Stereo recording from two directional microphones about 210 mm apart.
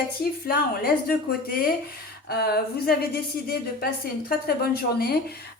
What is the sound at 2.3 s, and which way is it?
A woman's voice, 50° left (ahead or behind).